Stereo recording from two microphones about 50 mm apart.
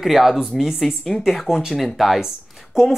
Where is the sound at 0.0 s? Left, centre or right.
Centre.